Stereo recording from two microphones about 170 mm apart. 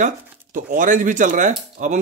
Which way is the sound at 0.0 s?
50° right (ahead or behind).